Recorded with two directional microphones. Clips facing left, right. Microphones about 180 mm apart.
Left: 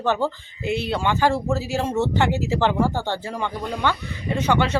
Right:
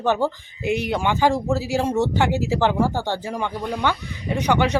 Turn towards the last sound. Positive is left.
turn(degrees=-15)  # may be behind; listen again after turning